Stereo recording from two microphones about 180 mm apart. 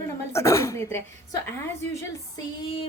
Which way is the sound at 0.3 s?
15° left (ahead or behind).